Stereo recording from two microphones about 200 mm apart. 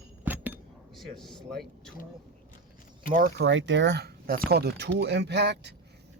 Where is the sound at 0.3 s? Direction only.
10° right (ahead or behind).